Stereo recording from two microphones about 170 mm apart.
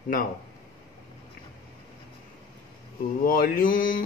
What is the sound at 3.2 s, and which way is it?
Speech, 60° left (ahead or behind).